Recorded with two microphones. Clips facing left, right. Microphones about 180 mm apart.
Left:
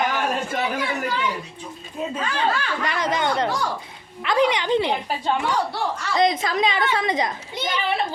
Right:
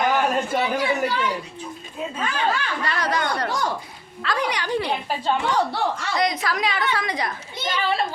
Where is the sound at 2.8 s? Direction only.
20° left (ahead or behind).